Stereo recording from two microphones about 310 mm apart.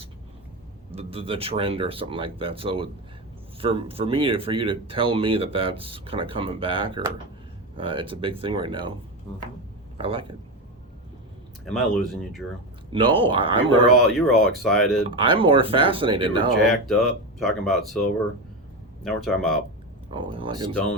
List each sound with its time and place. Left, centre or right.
0.9 s speech: centre
10.0 s speech: centre
11.6 s speech: centre
12.9 s speech: centre
13.9 s speech: centre
15.2 s speech: centre
16.8 s speech: centre
19.0 s speech: centre
20.1 s speech: centre